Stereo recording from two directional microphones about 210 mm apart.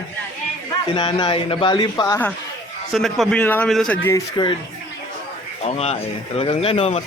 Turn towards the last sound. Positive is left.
turn(degrees=25)  # may be behind; listen again after turning